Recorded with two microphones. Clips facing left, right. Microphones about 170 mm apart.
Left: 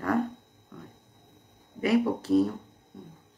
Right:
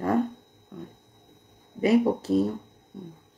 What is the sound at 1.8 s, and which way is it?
Speech, 25° right (ahead or behind).